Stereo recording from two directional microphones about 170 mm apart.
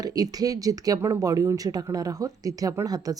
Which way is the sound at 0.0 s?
20° right (ahead or behind).